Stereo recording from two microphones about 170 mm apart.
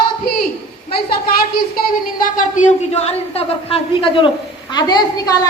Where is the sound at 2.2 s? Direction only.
50° left (ahead or behind).